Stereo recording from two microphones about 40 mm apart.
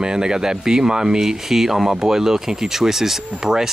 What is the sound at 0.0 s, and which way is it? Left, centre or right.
Speech, centre.